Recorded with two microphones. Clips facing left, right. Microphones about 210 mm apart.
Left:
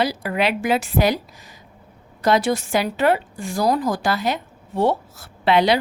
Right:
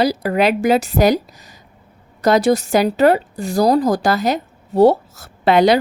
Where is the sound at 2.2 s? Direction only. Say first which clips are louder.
Right 5 dB; 40° right (ahead or behind).